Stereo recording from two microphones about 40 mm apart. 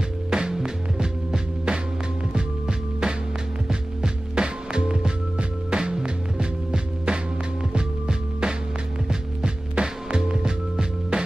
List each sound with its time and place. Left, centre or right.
0.3 s music: centre